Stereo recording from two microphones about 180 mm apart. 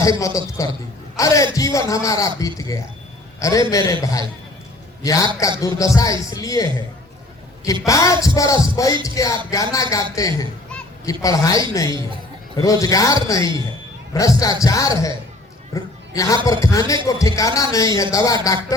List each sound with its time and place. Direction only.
0.0 s a woman's voice: 20° left (ahead or behind)
15.7 s a sound: 20° left (ahead or behind)
16.5 s a man's voice: 20° left (ahead or behind)